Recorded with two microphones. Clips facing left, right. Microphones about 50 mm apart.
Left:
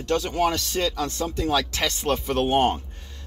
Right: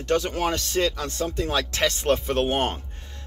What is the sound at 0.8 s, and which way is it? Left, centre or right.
Music, right.